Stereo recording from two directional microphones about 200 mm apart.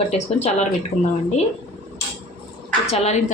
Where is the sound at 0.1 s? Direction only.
30° left (ahead or behind).